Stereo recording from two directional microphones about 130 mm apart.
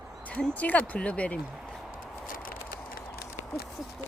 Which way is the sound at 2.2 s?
90° left.